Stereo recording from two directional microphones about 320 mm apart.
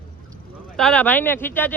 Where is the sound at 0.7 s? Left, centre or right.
Centre.